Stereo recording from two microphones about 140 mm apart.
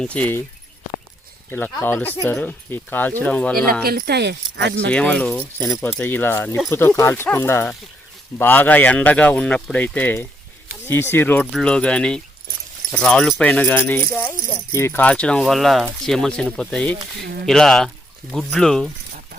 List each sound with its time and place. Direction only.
0.0 s speech: 10° left (ahead or behind)
1.5 s speech: 15° left (ahead or behind)
3.8 s speech: 90° right
4.9 s speech: 10° left (ahead or behind)